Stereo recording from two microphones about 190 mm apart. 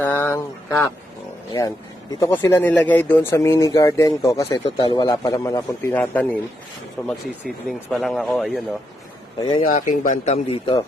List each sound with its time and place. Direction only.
0.0 s a sound: 10° left (ahead or behind)
2.1 s speech: 15° left (ahead or behind)
7.4 s speech: centre (ahead or behind)
9.4 s speech: 20° left (ahead or behind)
9.6 s speech: 45° left (ahead or behind)